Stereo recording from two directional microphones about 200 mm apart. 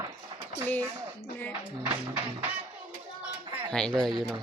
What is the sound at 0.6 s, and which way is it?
Speech, 10° left (ahead or behind).